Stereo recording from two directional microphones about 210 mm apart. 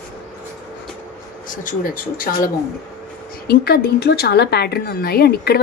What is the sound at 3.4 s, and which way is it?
A woman's voice, 50° left (ahead or behind).